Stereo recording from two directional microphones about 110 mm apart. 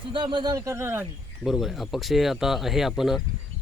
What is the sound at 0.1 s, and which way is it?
Speech, 45° right (ahead or behind).